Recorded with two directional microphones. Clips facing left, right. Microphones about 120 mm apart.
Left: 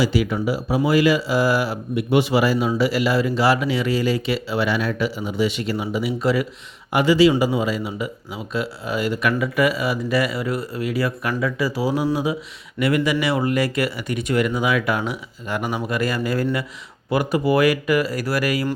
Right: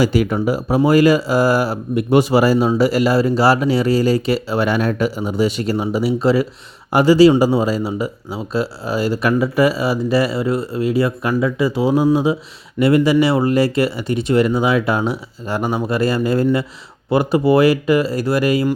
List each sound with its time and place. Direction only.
0.0 s speech: 45° right (ahead or behind); by 18.7 s 25° right (ahead or behind)